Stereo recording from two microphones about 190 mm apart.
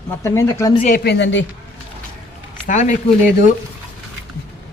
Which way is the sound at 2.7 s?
40° left (ahead or behind).